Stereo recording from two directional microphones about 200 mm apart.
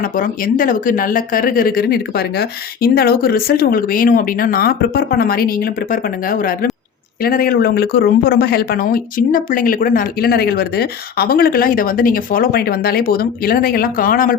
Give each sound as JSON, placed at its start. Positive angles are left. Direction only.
{"t": 0.0, "sound": "speech", "side_deg": 45}